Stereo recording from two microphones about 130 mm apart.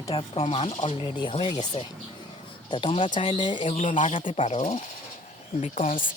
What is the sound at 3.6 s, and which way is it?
Speech, 55° left (ahead or behind).